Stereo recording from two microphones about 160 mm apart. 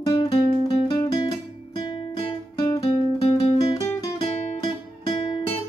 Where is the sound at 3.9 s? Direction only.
25° left (ahead or behind).